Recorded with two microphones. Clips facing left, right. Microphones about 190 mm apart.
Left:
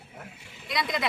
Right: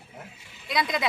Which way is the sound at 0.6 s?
Centre (ahead or behind).